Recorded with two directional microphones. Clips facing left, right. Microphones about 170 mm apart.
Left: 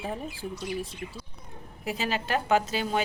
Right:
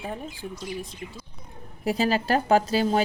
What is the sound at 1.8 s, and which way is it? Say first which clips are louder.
A woman's voice: right 7 dB; 35° right (ahead or behind).